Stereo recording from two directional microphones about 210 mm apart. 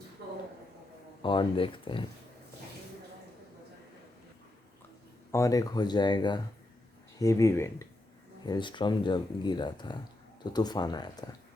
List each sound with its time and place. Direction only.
1.2 s speech: 25° left (ahead or behind)
5.3 s speech: 15° left (ahead or behind)